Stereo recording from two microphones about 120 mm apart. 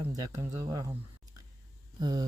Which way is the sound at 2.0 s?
30° right (ahead or behind).